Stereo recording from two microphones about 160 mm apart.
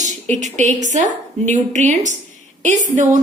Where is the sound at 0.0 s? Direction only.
50° right (ahead or behind).